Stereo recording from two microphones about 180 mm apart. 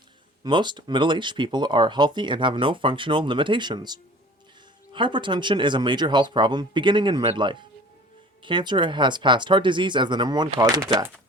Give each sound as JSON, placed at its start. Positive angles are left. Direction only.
{"t": 0.4, "sound": "speech", "side_deg": -25}